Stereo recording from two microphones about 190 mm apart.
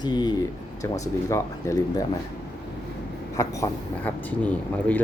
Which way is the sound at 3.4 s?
15° left (ahead or behind).